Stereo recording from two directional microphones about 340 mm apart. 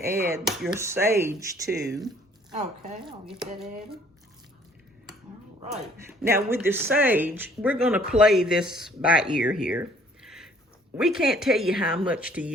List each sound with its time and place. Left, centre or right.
0.0 s speech: centre
2.5 s speech: right
6.2 s speech: centre
10.2 s a sound: centre
10.9 s speech: centre